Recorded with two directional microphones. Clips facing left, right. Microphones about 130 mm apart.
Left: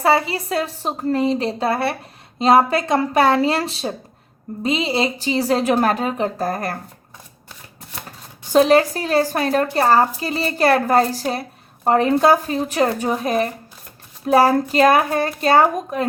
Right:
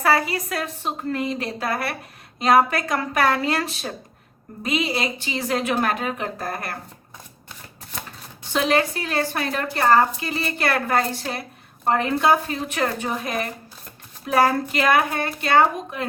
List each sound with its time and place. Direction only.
0.0 s a woman's voice: 25° left (ahead or behind)
8.5 s speech: 35° left (ahead or behind)